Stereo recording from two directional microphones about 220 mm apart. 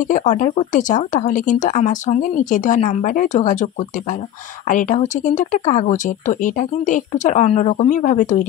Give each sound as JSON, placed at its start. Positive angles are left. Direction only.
{"t": 0.0, "sound": "speech", "side_deg": 35}
{"t": 4.6, "sound": "speech", "side_deg": 35}